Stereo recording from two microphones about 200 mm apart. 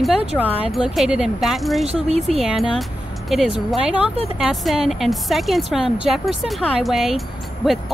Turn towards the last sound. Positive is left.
turn(degrees=0)  # may be behind; listen again after turning